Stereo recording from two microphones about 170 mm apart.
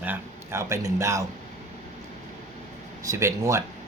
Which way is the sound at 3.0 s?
15° right (ahead or behind).